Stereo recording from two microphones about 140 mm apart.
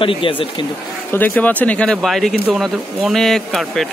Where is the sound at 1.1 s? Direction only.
10° left (ahead or behind).